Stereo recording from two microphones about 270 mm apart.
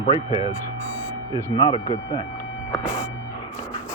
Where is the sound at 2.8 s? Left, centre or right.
Centre.